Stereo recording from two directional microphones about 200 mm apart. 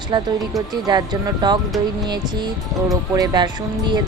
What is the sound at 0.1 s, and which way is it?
Speech, 20° right (ahead or behind).